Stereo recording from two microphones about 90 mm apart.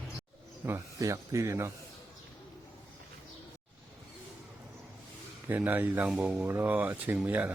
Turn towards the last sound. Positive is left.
turn(degrees=-15)  # may be behind; listen again after turning